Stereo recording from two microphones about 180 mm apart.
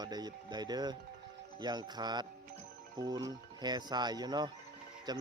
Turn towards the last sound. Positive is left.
turn(degrees=-25)  # may be behind; listen again after turning